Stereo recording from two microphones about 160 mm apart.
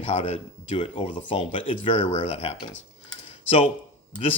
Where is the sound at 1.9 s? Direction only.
50° left (ahead or behind).